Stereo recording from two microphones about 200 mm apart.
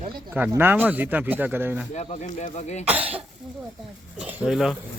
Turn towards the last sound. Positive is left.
turn(degrees=0)  # may be behind; listen again after turning